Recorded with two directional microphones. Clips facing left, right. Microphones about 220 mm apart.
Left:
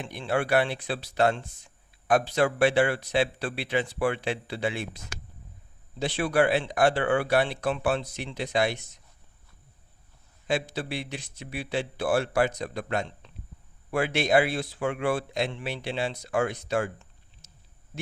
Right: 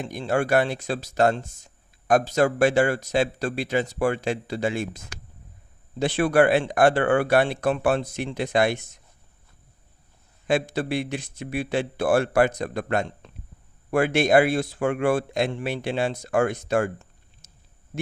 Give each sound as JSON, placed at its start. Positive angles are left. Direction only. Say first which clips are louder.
{"t": 0.0, "sound": "speech", "louder": "right 4 dB", "side_deg": -45}
{"t": 10.4, "sound": "speech", "louder": "right 5 dB", "side_deg": -50}